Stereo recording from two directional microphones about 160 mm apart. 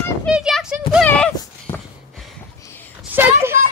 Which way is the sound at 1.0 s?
5° left (ahead or behind).